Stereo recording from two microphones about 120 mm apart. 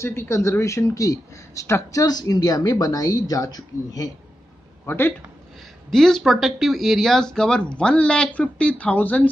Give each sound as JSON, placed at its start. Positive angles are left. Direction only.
{"t": 0.0, "sound": "speech", "side_deg": 20}
{"t": 4.8, "sound": "a man's voice", "side_deg": 15}
{"t": 5.9, "sound": "speech", "side_deg": 5}